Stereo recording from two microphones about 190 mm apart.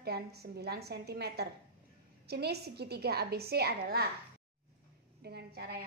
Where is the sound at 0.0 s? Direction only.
55° right (ahead or behind).